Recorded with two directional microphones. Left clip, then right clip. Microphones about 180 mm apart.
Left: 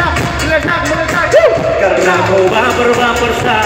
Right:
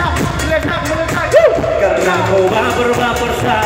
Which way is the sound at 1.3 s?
45° left (ahead or behind).